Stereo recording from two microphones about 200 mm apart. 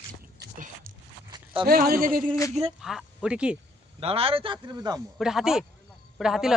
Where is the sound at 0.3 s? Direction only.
55° right (ahead or behind).